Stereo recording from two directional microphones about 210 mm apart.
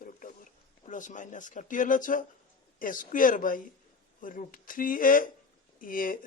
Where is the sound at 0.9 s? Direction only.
35° left (ahead or behind).